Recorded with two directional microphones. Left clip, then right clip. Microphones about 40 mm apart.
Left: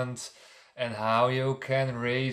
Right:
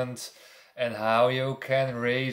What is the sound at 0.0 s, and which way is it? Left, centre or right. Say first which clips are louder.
Speech: right 2 dB; left.